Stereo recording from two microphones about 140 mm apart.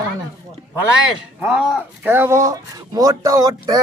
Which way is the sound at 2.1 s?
15° right (ahead or behind).